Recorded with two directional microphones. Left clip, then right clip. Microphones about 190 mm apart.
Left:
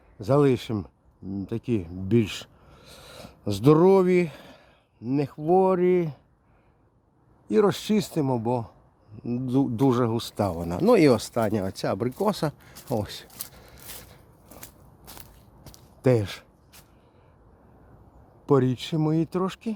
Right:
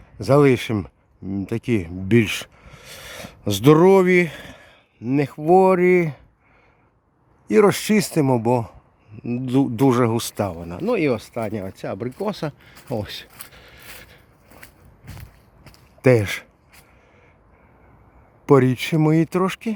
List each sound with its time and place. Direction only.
0.2 s speech: 15° right (ahead or behind)
7.4 s speech: 15° right (ahead or behind)
9.1 s speech: 10° right (ahead or behind)
10.4 s speech: 10° left (ahead or behind)
13.5 s a sound: 10° right (ahead or behind)
16.0 s speech: 15° right (ahead or behind)
18.4 s speech: 15° right (ahead or behind)